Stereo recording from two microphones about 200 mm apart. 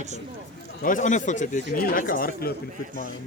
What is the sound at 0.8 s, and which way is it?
Speech, 40° left (ahead or behind).